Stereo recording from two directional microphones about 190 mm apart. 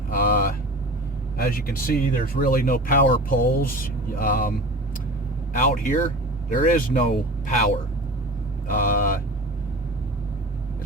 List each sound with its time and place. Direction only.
0.1 s vehicle: 50° left (ahead or behind)
1.4 s speech: 50° left (ahead or behind)
5.5 s speech: 45° left (ahead or behind)
8.6 s speech: 45° left (ahead or behind)